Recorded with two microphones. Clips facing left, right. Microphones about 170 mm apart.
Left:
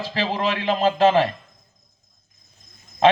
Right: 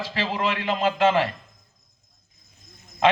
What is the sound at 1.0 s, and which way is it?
Speech, 20° left (ahead or behind).